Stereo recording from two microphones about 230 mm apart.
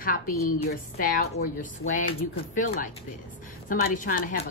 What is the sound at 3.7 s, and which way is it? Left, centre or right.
Speech, left.